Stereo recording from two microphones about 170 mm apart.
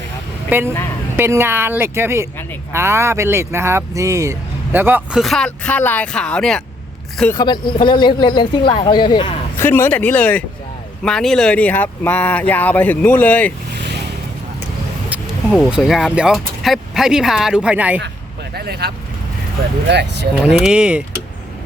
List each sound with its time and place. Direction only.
0.5 s speech: 10° right (ahead or behind)
5.2 s speech: centre (ahead or behind)
7.3 s speech: 25° left (ahead or behind)
9.6 s speech: 15° left (ahead or behind)
15.5 s speech: centre (ahead or behind)
18.5 s speech: 65° right (ahead or behind)
19.9 s speech: 90° right
20.4 s speech: 5° right (ahead or behind)